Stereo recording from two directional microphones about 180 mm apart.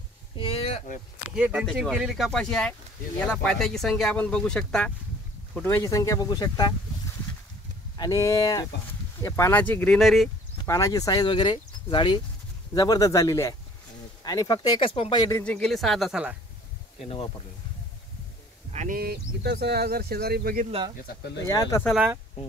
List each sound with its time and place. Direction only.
0.4 s a sound: 35° left (ahead or behind)
1.3 s speech: 5° right (ahead or behind); by 6.7 s 20° left (ahead or behind)
8.0 s speech: 20° left (ahead or behind); by 10.3 s centre (ahead or behind)
10.6 s speech: 20° left (ahead or behind)
15.4 s speech: 5° left (ahead or behind)
17.0 s speech: 30° left (ahead or behind)
18.7 s a sound: 40° right (ahead or behind)
18.9 s speech: 60° right (ahead or behind)
21.1 s speech: 55° left (ahead or behind)
21.5 s speech: 15° left (ahead or behind)
21.8 s speech: 5° right (ahead or behind)